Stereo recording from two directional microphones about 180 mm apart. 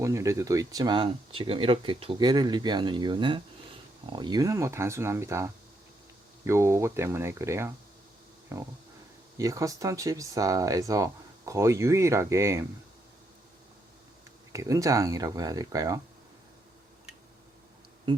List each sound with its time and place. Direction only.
0.0 s speech: 15° right (ahead or behind)
14.5 s speech: 15° right (ahead or behind)
18.1 s speech: 25° right (ahead or behind)